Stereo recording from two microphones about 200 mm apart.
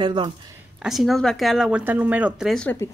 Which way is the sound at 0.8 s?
Centre (ahead or behind).